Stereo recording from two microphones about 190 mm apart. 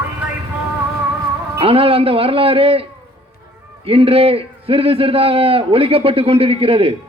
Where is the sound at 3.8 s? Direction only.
30° right (ahead or behind).